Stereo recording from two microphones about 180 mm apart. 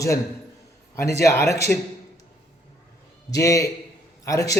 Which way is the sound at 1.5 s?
15° left (ahead or behind).